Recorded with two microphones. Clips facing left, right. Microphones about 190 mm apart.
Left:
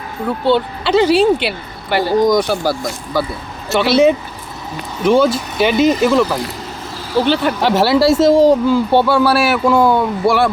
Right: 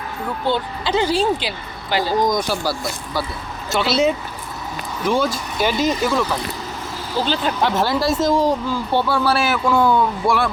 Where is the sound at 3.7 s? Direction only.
60° left (ahead or behind).